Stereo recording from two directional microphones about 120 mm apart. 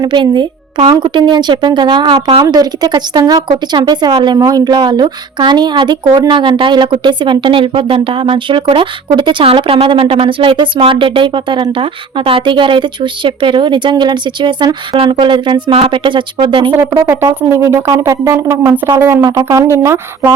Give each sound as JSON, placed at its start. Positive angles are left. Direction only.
{"t": 0.0, "sound": "speech", "side_deg": -40}
{"t": 16.7, "sound": "speech", "side_deg": -30}